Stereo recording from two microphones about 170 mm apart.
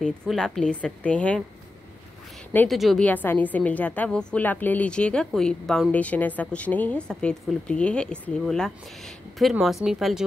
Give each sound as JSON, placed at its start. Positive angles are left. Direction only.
{"t": 0.3, "sound": "a woman's voice", "side_deg": 5}
{"t": 2.5, "sound": "a woman's voice", "side_deg": 10}